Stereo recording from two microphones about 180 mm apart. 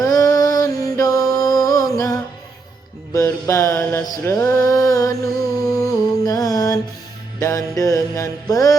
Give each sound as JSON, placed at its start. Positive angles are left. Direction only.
{"t": 0.0, "sound": "music", "side_deg": 20}
{"t": 3.1, "sound": "mantra", "side_deg": 20}
{"t": 7.3, "sound": "music", "side_deg": 20}